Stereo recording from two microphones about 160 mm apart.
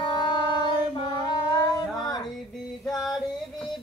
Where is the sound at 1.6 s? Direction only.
25° left (ahead or behind).